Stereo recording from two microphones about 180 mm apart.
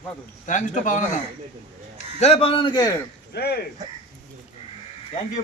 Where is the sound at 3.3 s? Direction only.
60° left (ahead or behind).